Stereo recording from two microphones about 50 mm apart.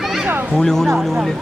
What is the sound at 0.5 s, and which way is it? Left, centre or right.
Speech, centre.